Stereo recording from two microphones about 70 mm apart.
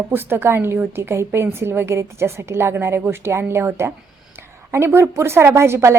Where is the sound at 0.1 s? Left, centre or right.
Right.